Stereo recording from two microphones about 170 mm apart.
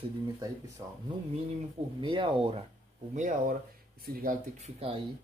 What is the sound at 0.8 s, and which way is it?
Speech, 25° right (ahead or behind).